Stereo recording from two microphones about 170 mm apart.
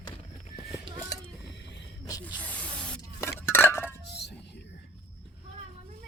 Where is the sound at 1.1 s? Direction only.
20° left (ahead or behind).